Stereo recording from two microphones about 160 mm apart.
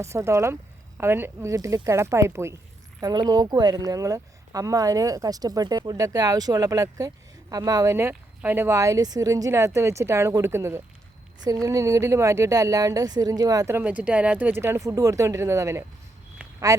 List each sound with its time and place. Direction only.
0.0 s speech: 20° right (ahead or behind)